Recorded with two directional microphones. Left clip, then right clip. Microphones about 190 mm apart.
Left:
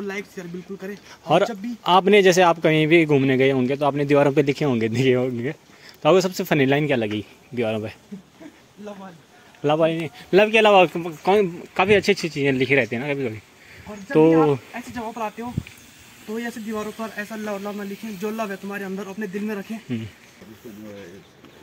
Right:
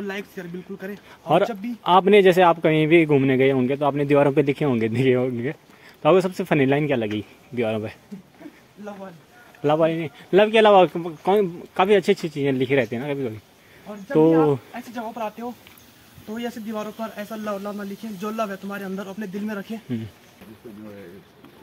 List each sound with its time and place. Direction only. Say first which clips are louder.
0.0 s speech: left 1 dB; 10° right (ahead or behind)
1.5 s speech: even; centre (ahead or behind)
9.6 s speech: even; centre (ahead or behind)
17.0 s speech: even; 25° right (ahead or behind); by 20.0 s 5° right (ahead or behind)